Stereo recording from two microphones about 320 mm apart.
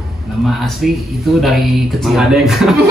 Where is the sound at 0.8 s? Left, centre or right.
Centre.